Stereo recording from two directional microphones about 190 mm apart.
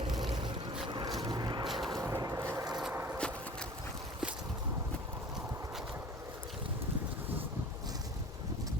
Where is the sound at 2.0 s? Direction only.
15° right (ahead or behind).